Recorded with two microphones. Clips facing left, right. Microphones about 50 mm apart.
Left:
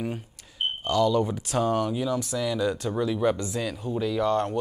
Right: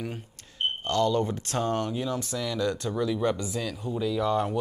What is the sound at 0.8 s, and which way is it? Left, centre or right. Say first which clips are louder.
Speech: left 3 dB; centre.